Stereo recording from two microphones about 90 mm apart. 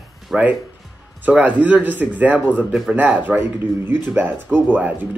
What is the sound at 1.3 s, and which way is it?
Speech, 15° right (ahead or behind).